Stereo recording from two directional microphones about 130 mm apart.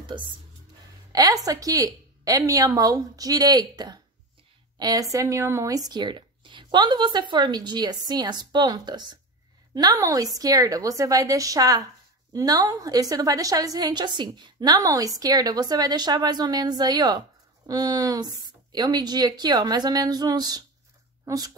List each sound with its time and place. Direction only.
1.1 s a woman's voice: 30° right (ahead or behind)